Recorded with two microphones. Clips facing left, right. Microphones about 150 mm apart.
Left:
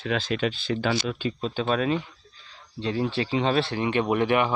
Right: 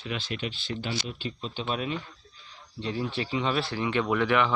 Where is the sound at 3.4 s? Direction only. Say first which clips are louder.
Left 4 dB; 30° left (ahead or behind).